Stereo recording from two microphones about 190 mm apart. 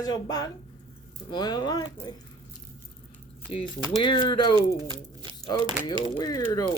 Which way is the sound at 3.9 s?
25° left (ahead or behind).